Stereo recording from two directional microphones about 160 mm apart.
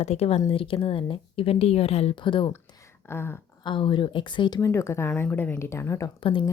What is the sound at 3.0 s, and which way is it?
Speech, 15° left (ahead or behind).